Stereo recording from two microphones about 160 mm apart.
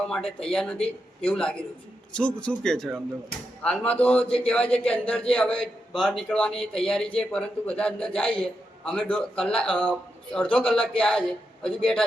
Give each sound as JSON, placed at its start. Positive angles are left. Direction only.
{"t": 0.2, "sound": "speech", "side_deg": 35}
{"t": 0.4, "sound": "a man's voice", "side_deg": 5}